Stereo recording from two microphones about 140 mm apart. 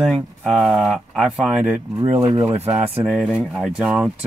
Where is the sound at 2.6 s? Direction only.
45° right (ahead or behind).